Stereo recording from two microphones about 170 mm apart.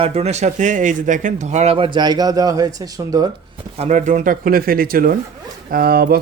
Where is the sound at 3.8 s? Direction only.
40° right (ahead or behind).